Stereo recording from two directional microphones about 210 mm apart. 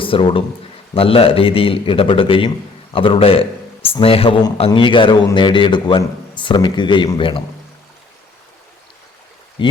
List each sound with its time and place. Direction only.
0.0 s speech: 25° left (ahead or behind)
9.6 s speech: 25° left (ahead or behind)